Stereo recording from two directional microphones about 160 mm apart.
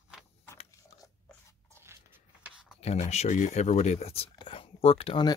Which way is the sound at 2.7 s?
40° left (ahead or behind).